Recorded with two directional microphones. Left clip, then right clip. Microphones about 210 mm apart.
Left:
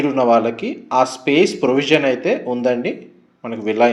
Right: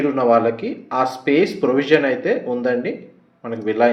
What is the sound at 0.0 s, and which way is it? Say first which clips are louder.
Speech: left 1 dB; 30° left (ahead or behind).